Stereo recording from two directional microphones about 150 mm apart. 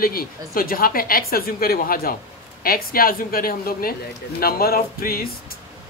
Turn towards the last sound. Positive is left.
turn(degrees=85)